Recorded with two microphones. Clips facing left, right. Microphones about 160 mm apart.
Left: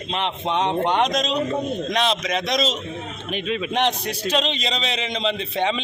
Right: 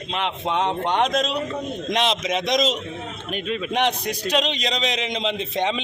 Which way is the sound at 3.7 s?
10° right (ahead or behind).